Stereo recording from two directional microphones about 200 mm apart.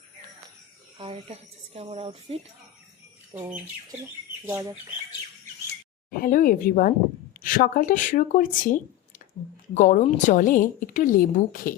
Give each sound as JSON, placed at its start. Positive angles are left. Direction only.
{"t": 0.9, "sound": "speech", "side_deg": -30}
{"t": 3.3, "sound": "speech", "side_deg": -10}
{"t": 6.1, "sound": "speech", "side_deg": 45}